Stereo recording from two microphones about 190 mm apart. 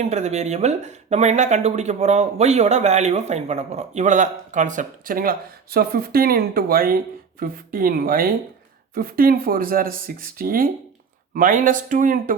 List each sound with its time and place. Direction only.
0.0 s speech: 35° right (ahead or behind)